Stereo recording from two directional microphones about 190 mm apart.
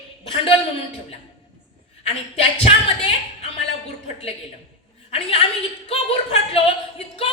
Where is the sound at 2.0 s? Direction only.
35° left (ahead or behind).